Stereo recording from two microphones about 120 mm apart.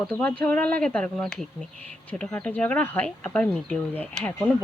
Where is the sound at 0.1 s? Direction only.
10° left (ahead or behind).